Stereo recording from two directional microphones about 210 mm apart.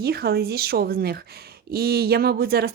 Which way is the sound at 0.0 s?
45° right (ahead or behind).